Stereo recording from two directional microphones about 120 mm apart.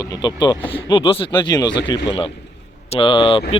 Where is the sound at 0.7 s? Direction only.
45° left (ahead or behind).